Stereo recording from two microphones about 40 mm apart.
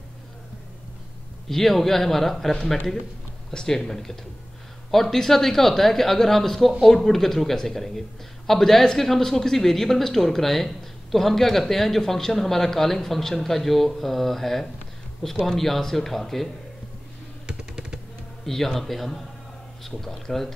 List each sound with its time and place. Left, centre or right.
1.5 s speech: centre
17.5 s typing: right
18.4 s speech: centre